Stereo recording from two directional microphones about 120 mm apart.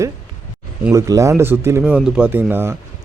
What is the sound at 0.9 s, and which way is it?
A man's voice, 30° right (ahead or behind).